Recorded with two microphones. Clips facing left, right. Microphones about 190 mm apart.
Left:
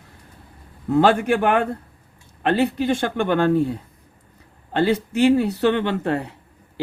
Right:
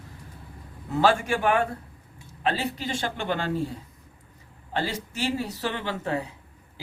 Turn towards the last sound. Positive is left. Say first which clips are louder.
# left 11 dB
turn(degrees=65)  # may be behind; listen again after turning